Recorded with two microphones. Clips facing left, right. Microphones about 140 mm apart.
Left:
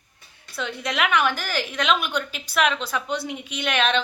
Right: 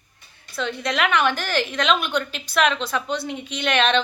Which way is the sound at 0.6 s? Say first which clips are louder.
Right 2 dB; 10° left (ahead or behind).